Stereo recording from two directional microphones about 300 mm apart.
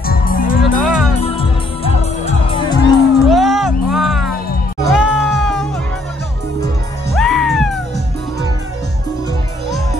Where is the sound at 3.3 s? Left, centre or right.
Centre.